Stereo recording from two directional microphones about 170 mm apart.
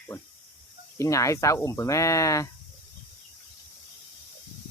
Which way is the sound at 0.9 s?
20° left (ahead or behind).